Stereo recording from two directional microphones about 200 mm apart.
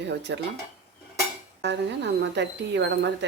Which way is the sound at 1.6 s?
60° right (ahead or behind).